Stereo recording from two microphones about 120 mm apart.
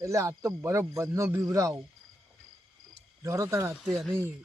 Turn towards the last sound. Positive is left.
turn(degrees=-20)  # may be behind; listen again after turning